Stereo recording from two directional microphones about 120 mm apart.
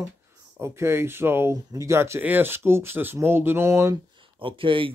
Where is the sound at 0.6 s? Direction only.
20° right (ahead or behind).